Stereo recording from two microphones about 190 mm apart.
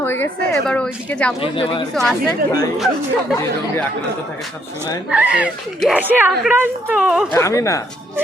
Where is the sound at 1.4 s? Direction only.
30° left (ahead or behind).